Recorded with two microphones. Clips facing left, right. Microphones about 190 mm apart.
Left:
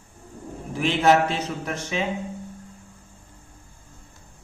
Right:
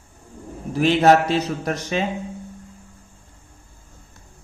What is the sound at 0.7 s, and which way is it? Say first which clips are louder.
A man's voice: right 4 dB; 40° right (ahead or behind).